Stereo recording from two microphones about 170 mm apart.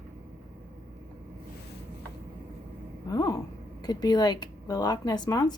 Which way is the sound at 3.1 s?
20° left (ahead or behind).